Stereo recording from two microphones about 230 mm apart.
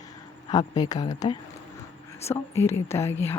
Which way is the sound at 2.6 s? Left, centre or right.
Centre.